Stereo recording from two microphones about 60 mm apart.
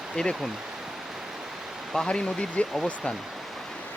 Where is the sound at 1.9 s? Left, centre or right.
Centre.